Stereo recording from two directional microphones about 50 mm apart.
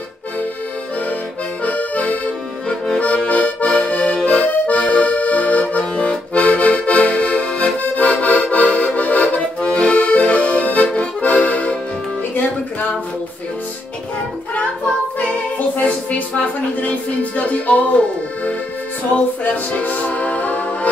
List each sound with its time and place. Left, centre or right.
1.6 s accordion: left
16.8 s music: left